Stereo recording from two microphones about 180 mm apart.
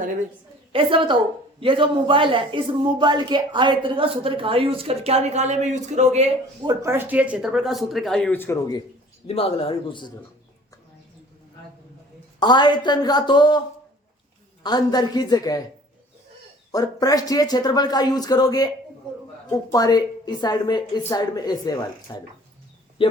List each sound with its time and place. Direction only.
0.7 s speech: 30° right (ahead or behind)
6.6 s speech: 20° right (ahead or behind); by 8.8 s 15° left (ahead or behind)
9.2 s a man's voice: 35° left (ahead or behind)
12.4 s a woman's voice: 25° left (ahead or behind)
14.6 s a woman's voice: 25° left (ahead or behind)
16.7 s a woman's voice: 20° left (ahead or behind)
23.0 s a sound: 30° left (ahead or behind)